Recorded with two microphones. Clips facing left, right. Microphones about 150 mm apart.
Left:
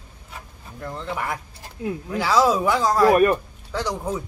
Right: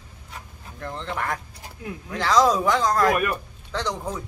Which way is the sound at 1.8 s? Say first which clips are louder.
Left 7 dB; 25° left (ahead or behind).